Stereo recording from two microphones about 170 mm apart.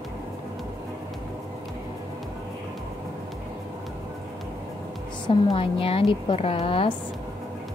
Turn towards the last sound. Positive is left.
turn(degrees=30)  # may be behind; listen again after turning